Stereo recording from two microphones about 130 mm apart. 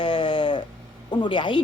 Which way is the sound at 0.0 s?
40° left (ahead or behind).